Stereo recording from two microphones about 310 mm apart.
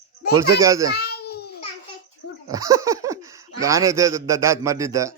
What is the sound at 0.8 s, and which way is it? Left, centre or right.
Babbling, left.